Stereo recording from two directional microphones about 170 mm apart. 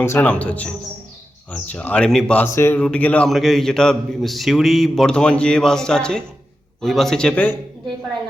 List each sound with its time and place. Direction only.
0.0 s a man's voice: 10° left (ahead or behind)